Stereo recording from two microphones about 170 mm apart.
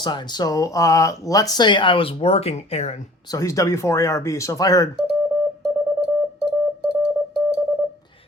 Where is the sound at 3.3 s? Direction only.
20° left (ahead or behind).